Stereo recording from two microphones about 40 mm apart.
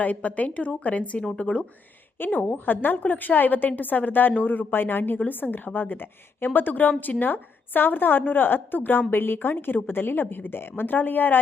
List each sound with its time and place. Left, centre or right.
0.0 s a woman's voice: left
2.1 s a woman's voice: left
10.9 s a woman's voice: left